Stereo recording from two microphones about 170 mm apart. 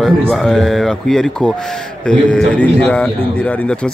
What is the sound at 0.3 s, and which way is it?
A man's voice, 5° left (ahead or behind).